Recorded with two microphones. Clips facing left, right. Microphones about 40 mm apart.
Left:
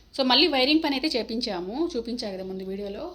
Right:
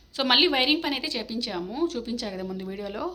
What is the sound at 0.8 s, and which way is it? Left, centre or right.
A woman's voice, right.